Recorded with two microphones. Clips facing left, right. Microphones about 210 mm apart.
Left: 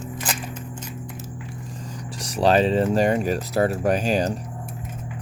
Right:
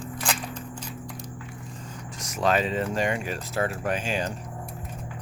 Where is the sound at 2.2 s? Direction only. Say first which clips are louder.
Left 6 dB; 35° left (ahead or behind).